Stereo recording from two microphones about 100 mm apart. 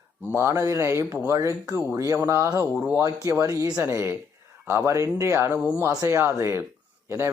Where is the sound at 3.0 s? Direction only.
35° right (ahead or behind).